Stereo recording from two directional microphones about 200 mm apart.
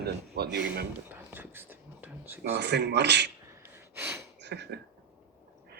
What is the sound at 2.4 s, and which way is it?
Speech, 55° right (ahead or behind).